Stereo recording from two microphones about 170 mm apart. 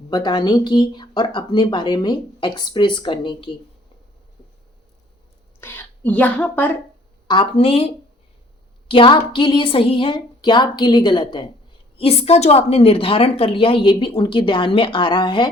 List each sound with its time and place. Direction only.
0.1 s speech: 25° left (ahead or behind)
5.5 s a woman's voice: 10° left (ahead or behind)
7.3 s a woman's voice: 30° left (ahead or behind)
8.9 s a woman's voice: 30° left (ahead or behind)